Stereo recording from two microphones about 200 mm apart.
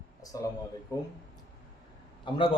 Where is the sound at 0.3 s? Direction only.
15° left (ahead or behind).